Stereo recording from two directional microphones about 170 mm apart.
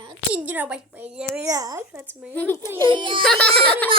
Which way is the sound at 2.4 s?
10° left (ahead or behind).